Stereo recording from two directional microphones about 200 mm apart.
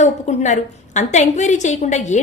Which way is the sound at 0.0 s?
35° left (ahead or behind).